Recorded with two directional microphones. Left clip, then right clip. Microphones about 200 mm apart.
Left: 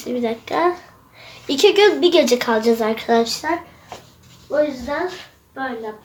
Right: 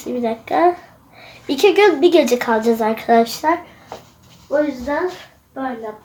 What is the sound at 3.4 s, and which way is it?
Speech, 30° right (ahead or behind).